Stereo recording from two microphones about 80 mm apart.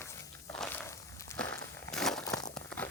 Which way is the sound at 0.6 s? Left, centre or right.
Left.